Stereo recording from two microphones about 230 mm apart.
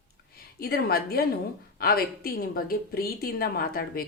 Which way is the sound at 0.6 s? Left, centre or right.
Left.